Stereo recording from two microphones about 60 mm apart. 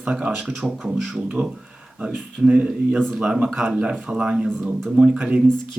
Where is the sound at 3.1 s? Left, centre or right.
Centre.